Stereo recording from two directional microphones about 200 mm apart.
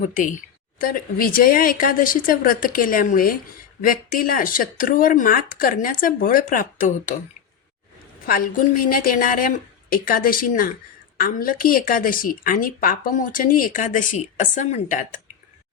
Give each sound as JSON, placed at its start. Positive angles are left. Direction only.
{"t": 0.1, "sound": "a woman's voice", "side_deg": 40}
{"t": 8.3, "sound": "speech", "side_deg": 45}